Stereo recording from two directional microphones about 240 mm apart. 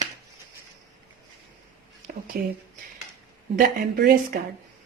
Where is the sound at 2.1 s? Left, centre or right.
Right.